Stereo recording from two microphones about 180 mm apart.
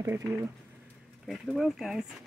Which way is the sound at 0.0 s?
15° right (ahead or behind).